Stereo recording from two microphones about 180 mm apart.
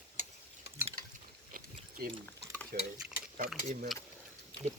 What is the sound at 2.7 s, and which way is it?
Stir, 55° right (ahead or behind).